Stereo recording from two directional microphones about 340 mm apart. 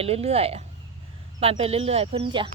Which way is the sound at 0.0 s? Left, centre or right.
Centre.